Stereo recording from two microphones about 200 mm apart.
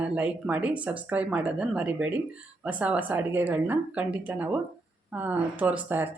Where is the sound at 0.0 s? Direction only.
5° right (ahead or behind).